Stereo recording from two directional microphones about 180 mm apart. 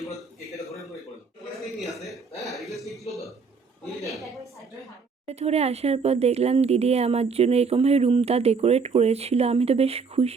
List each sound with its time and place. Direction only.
1.8 s a sound: centre (ahead or behind)
4.0 s a woman's voice: centre (ahead or behind)
5.2 s speech: 35° right (ahead or behind)